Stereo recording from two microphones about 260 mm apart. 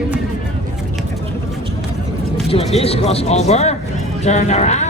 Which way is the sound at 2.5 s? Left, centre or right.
Left.